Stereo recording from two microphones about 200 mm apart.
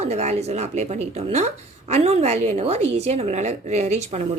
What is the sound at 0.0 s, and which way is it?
A woman's voice, 35° right (ahead or behind).